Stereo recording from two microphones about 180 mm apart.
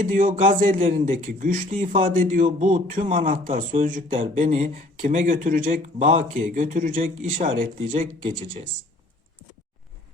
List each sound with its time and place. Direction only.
0.0 s speech: 45° right (ahead or behind)